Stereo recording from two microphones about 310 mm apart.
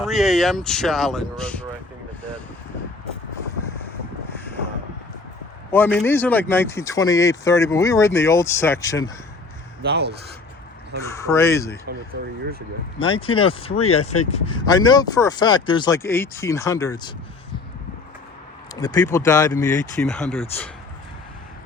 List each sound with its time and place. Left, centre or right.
0.0 s speech: centre
5.7 s speech: centre
9.8 s speech: right
11.0 s speech: centre
12.1 s speech: right
13.0 s speech: centre
18.7 s speech: centre